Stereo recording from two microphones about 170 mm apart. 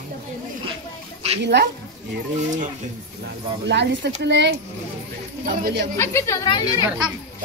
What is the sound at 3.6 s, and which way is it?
Speech, 85° right.